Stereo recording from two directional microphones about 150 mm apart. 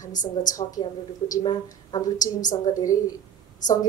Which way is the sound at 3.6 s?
55° left (ahead or behind).